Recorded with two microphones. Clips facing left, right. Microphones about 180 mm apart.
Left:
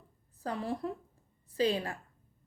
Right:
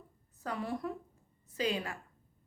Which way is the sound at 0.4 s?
30° left (ahead or behind).